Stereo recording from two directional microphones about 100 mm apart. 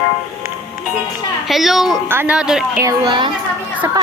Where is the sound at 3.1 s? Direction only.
55° right (ahead or behind).